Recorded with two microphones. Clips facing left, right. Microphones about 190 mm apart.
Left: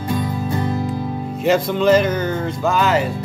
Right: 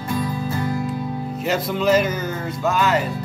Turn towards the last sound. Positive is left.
turn(degrees=0)  # may be behind; listen again after turning